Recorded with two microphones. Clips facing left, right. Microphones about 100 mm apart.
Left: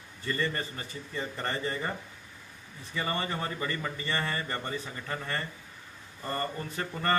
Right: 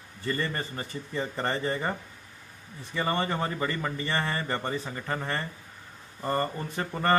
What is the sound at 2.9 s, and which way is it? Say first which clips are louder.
A man's voice: right 4 dB; 30° right (ahead or behind).